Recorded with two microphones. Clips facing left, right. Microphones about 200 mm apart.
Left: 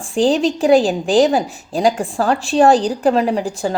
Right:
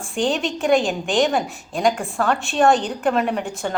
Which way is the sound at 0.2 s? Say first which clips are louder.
Left 7 dB; 35° left (ahead or behind).